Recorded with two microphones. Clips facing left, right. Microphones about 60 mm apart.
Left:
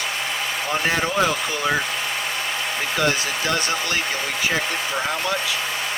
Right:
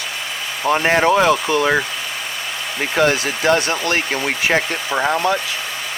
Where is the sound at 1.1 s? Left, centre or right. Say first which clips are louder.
Right 7 dB; right.